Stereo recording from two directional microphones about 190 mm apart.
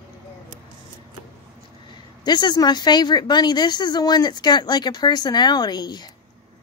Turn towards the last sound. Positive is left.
turn(degrees=20)  # may be behind; listen again after turning